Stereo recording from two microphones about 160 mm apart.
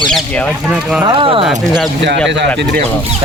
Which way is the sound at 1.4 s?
Centre (ahead or behind).